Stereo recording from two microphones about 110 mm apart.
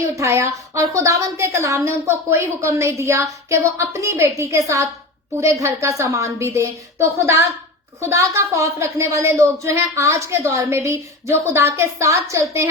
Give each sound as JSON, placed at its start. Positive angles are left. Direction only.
{"t": 0.2, "sound": "a woman's voice", "side_deg": -25}